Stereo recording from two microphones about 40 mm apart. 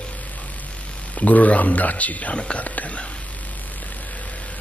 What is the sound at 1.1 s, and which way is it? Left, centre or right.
Speech, left.